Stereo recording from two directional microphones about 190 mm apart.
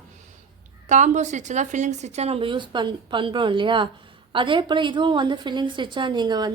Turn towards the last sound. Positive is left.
turn(degrees=-20)  # may be behind; listen again after turning